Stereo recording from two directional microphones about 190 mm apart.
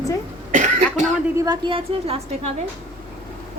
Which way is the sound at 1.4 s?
25° right (ahead or behind).